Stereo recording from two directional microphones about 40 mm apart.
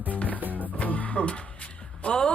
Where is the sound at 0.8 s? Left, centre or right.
Left.